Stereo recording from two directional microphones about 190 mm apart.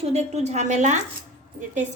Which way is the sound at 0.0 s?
35° right (ahead or behind).